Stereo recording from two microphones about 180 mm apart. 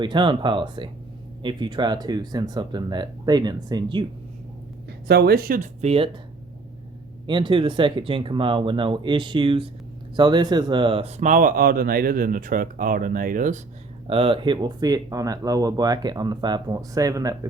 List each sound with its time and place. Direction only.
0.0 s speech: 25° right (ahead or behind)
4.9 s speech: 65° right (ahead or behind)
5.8 s speech: 35° right (ahead or behind)
7.3 s speech: 25° right (ahead or behind); by 13.6 s 50° right (ahead or behind)
14.1 s speech: 30° right (ahead or behind)